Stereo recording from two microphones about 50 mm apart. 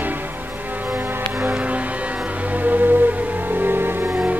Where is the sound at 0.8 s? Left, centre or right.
Right.